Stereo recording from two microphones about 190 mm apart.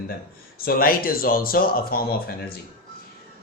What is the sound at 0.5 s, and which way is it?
Speech, 50° left (ahead or behind).